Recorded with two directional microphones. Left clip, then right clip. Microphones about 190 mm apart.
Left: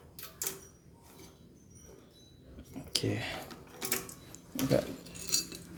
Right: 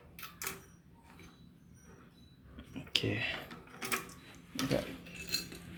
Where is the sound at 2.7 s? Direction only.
Centre (ahead or behind).